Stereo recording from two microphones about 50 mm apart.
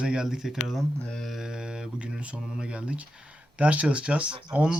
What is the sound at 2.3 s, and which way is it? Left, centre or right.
Mantra, centre.